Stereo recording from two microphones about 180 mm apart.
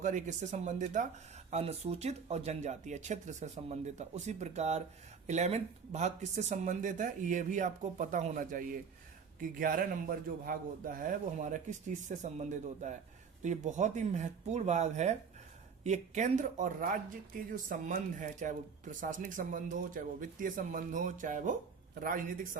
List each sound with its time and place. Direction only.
0.0 s speech: 45° right (ahead or behind)